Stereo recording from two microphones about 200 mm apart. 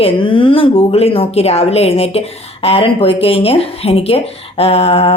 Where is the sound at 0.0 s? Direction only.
25° left (ahead or behind).